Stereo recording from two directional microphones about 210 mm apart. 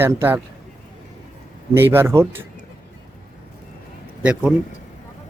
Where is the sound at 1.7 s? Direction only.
10° right (ahead or behind).